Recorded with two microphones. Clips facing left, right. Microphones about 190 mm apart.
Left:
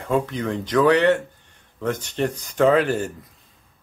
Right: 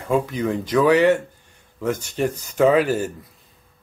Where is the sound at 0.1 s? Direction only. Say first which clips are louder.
Right 2 dB; 10° right (ahead or behind).